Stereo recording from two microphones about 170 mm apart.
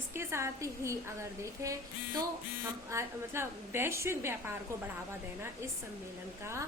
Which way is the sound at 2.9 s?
15° right (ahead or behind).